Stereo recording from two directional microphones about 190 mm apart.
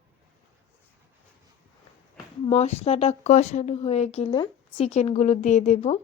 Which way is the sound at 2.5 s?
35° left (ahead or behind).